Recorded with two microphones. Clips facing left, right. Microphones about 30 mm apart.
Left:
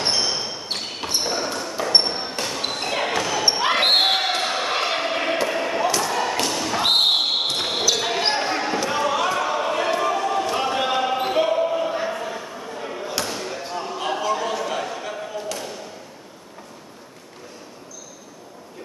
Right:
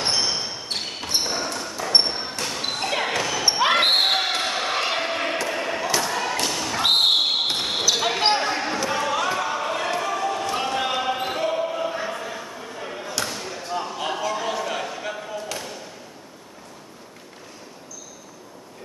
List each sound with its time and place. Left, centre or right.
0.1 s basketball bounce: centre
1.2 s a sound: centre
2.4 s basketball bounce: centre
5.5 s slam: centre
5.9 s thump: centre
6.4 s thump: centre
7.5 s basketball bounce: centre
11.5 s a sound: centre
13.3 s basketball bounce: centre
13.8 s a sound: centre
14.4 s basketball bounce: centre